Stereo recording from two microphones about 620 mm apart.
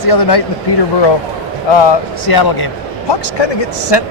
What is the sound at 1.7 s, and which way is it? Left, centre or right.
Speech, left.